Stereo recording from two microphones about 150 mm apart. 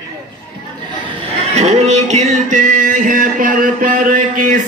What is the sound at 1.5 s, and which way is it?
Music, 45° right (ahead or behind).